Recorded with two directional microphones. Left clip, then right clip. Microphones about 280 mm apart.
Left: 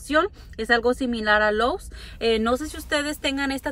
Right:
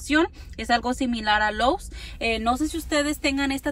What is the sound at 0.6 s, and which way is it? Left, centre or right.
Speech, right.